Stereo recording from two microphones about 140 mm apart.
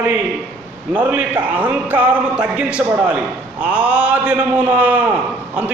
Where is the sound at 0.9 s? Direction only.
10° right (ahead or behind).